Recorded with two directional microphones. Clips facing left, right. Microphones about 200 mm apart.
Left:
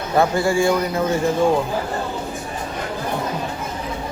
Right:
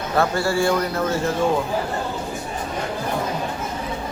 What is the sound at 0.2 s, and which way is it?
Speech, 15° left (ahead or behind).